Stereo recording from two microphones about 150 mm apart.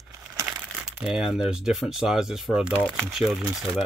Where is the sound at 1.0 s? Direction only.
5° right (ahead or behind).